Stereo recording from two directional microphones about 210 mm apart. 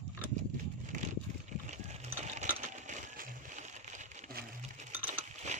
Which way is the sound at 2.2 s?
35° right (ahead or behind).